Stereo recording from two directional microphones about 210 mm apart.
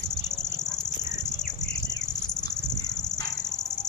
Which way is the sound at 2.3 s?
20° left (ahead or behind).